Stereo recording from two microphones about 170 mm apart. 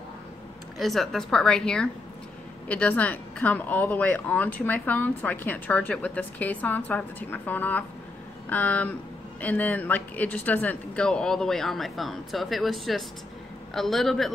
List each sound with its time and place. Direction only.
0.7 s a woman's voice: centre (ahead or behind)